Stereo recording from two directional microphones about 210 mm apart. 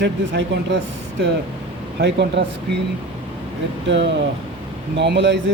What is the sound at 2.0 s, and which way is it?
Speech, 55° right (ahead or behind).